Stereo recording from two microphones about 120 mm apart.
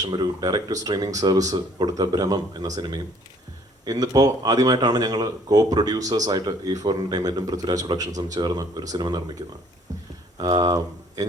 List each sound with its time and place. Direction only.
0.0 s speech: 35° right (ahead or behind)
9.9 s a sound: 25° right (ahead or behind)
10.3 s speech: 35° right (ahead or behind)